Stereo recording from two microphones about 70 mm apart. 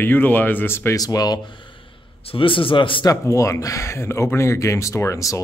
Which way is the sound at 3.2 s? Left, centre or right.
Left.